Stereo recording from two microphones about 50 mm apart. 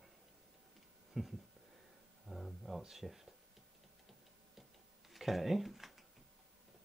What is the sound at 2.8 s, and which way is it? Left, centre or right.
Speech, centre.